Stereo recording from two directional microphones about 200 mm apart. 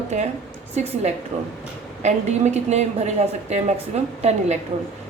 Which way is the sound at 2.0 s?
35° right (ahead or behind).